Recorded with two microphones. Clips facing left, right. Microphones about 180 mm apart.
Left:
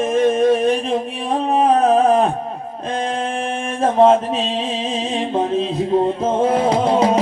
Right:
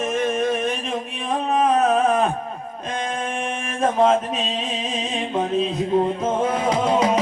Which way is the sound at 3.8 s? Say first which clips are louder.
Left 5 dB; 30° left (ahead or behind).